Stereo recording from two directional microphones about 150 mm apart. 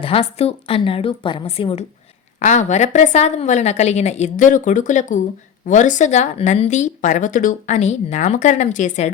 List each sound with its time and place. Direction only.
0.0 s speech: 40° left (ahead or behind)
2.4 s a woman's voice: 55° left (ahead or behind)